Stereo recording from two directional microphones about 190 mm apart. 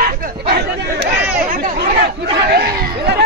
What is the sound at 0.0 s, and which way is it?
Chatter, 55° right (ahead or behind).